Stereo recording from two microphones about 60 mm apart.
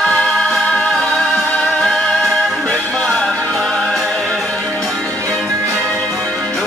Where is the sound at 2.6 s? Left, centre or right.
Centre.